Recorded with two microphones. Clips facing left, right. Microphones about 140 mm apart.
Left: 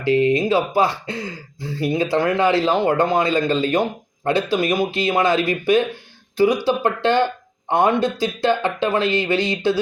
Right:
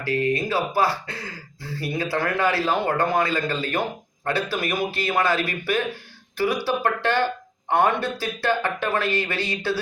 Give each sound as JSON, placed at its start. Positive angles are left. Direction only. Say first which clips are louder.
{"t": 0.0, "sound": "speech", "louder": "left 6 dB", "side_deg": 25}